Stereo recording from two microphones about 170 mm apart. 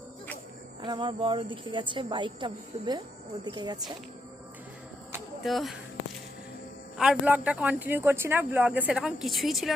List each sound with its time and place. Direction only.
0.8 s a woman's voice: 30° right (ahead or behind)
5.4 s speech: centre (ahead or behind)
6.9 s speech: 5° right (ahead or behind)